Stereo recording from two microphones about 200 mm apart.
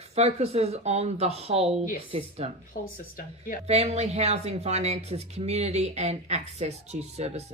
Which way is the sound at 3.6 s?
30° right (ahead or behind).